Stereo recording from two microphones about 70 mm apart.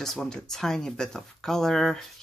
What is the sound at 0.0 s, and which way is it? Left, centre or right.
Speech, centre.